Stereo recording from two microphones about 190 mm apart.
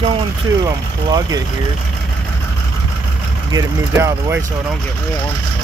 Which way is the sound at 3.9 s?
10° right (ahead or behind).